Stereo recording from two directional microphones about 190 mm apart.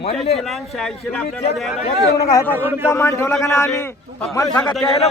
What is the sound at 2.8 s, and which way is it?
A man's voice, 15° left (ahead or behind).